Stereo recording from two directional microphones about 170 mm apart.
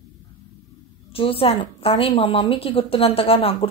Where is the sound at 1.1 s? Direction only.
35° left (ahead or behind).